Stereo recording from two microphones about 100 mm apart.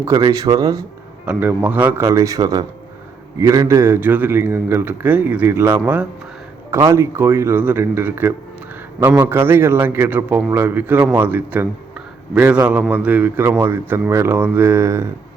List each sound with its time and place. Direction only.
0.0 s speech: 35° right (ahead or behind)
1.2 s a man's voice: 15° right (ahead or behind)
2.0 s a man's voice: 30° right (ahead or behind)
6.7 s a man's voice: 30° right (ahead or behind)